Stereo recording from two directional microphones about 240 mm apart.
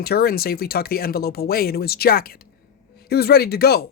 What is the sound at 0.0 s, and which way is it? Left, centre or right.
Speech, left.